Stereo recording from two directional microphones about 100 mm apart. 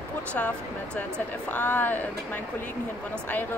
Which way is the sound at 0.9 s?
15° left (ahead or behind).